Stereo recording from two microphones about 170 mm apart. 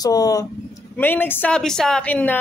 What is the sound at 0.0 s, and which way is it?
A woman's voice, 20° left (ahead or behind).